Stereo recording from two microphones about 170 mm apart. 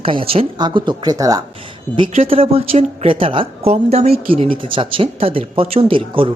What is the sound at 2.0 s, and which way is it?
Speech, 35° right (ahead or behind).